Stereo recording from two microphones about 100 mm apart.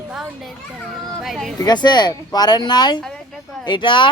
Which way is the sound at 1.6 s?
45° left (ahead or behind).